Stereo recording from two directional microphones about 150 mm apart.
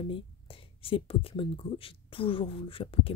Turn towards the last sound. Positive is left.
turn(degrees=40)  # may be behind; listen again after turning